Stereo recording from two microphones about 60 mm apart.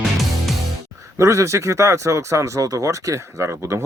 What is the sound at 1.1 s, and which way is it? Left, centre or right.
Speech, right.